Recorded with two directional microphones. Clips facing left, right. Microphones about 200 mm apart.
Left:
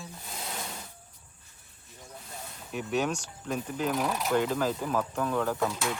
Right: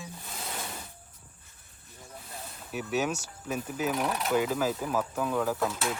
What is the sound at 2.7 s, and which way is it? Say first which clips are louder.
Speech: even; 5° right (ahead or behind).